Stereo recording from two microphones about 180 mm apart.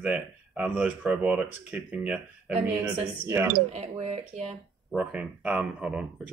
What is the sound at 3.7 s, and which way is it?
Speech, 35° right (ahead or behind).